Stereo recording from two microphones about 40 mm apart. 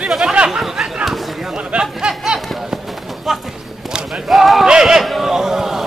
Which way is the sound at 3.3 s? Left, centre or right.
Centre.